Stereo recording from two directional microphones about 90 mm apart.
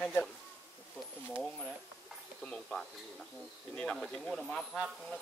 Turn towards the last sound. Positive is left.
turn(degrees=10)  # may be behind; listen again after turning